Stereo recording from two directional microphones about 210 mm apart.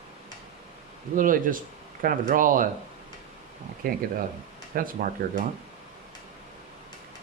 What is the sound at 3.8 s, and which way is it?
Speech, 40° right (ahead or behind).